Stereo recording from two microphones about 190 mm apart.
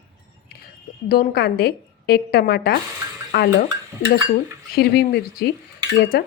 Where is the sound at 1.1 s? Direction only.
55° left (ahead or behind).